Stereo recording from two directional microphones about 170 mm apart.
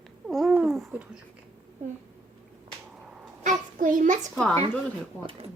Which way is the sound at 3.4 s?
50° right (ahead or behind).